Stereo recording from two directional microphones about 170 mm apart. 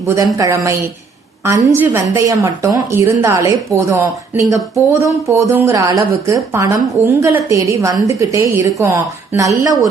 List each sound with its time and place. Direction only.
0.3 s a woman's voice: 15° right (ahead or behind)